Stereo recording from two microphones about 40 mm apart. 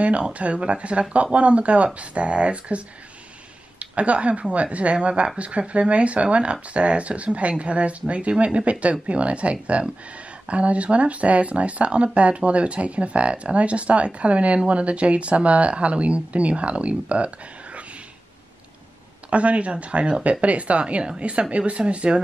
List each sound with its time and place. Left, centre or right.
0.0 s speech: right
3.8 s speech: right
19.3 s speech: right